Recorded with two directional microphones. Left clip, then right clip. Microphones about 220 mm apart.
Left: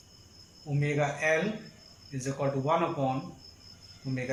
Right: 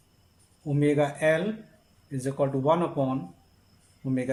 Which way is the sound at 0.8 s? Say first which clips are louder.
Right 5 dB; 25° right (ahead or behind).